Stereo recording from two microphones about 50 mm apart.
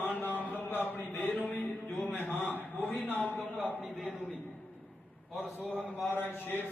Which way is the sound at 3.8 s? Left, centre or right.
Centre.